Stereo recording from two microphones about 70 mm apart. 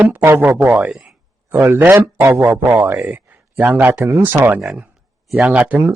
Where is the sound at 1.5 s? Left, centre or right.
Right.